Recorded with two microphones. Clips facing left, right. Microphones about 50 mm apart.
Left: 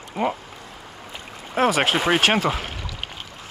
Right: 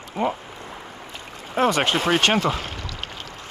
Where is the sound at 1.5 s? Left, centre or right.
Centre.